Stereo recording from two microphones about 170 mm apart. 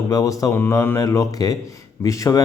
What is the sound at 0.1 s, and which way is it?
Speech, 20° left (ahead or behind).